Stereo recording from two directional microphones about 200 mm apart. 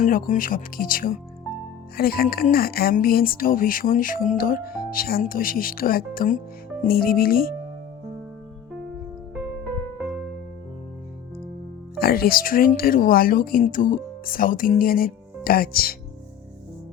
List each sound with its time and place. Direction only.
0.0 s speech: 40° left (ahead or behind)
11.9 s speech: 50° left (ahead or behind)